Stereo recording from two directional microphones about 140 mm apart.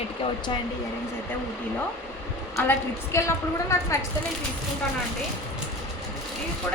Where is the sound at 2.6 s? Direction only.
20° left (ahead or behind).